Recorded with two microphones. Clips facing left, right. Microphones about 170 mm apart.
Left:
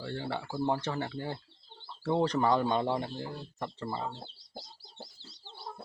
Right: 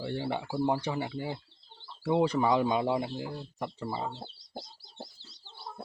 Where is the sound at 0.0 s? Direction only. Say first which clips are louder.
Right 3 dB; 15° right (ahead or behind).